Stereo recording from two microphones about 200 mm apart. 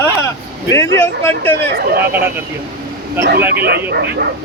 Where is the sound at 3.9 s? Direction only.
55° right (ahead or behind).